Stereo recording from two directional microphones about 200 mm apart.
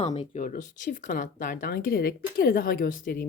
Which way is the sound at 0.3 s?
40° left (ahead or behind).